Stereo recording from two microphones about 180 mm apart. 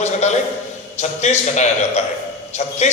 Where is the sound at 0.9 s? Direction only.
40° left (ahead or behind).